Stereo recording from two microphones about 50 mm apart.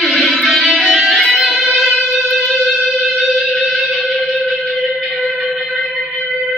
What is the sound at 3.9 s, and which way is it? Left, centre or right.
Music, centre.